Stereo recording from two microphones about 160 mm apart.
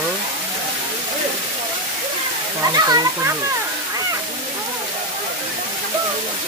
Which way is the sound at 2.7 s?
25° right (ahead or behind).